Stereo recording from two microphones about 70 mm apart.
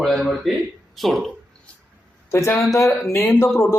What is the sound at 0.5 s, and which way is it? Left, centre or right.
Speech, centre.